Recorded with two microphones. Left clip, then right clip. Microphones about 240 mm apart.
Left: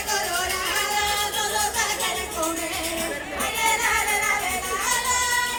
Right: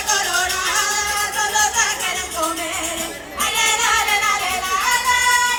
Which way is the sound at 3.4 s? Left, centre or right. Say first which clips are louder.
Right 5 dB; centre.